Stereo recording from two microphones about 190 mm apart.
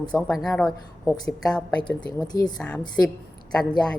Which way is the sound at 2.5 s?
5° left (ahead or behind).